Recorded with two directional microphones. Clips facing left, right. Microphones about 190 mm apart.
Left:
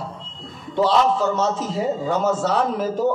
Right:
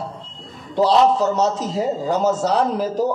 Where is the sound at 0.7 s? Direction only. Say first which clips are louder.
Right 3 dB; 35° right (ahead or behind).